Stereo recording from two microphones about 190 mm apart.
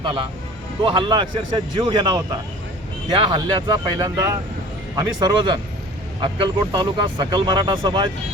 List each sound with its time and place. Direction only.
0.0 s a man's voice: 25° right (ahead or behind)